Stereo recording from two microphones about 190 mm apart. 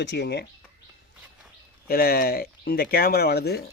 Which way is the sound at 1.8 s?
50° left (ahead or behind).